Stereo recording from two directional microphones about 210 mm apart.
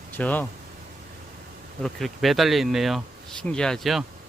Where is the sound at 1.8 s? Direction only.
Centre (ahead or behind).